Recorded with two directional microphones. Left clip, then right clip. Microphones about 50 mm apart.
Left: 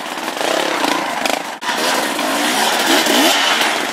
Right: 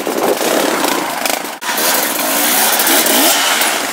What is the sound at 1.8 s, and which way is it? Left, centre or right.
Vehicle, right.